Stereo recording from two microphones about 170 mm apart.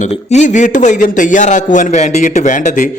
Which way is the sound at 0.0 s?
40° left (ahead or behind).